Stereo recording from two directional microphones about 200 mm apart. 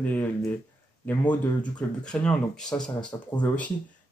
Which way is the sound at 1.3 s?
5° left (ahead or behind).